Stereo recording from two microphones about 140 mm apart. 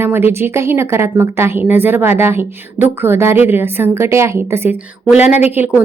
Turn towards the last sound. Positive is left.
turn(degrees=-15)  # may be behind; listen again after turning